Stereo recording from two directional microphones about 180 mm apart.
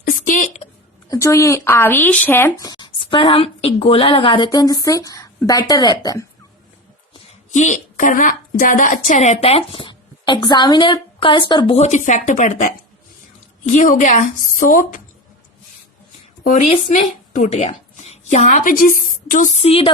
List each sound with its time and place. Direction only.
0.3 s a sound: 45° left (ahead or behind)
1.1 s speech: 15° left (ahead or behind)
7.1 s a woman's voice: 40° left (ahead or behind)
16.4 s a woman's voice: 40° left (ahead or behind)